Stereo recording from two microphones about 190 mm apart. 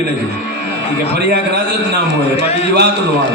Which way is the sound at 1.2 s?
60° right (ahead or behind).